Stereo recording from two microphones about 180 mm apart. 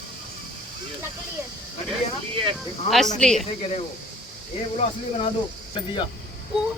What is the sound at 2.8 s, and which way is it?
Speech, centre (ahead or behind).